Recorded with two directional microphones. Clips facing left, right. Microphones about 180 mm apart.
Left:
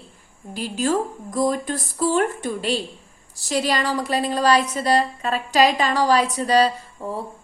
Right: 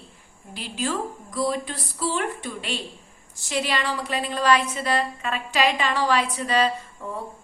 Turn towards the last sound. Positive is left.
turn(degrees=30)  # may be behind; listen again after turning